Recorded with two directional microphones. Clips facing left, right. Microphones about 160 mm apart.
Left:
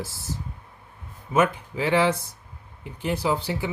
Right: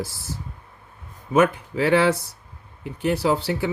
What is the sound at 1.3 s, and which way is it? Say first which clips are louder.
Speech: right 4 dB; 65° right (ahead or behind).